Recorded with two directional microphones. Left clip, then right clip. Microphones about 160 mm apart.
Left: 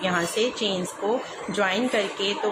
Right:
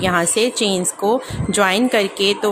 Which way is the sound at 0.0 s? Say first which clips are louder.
Right 7 dB; 45° right (ahead or behind).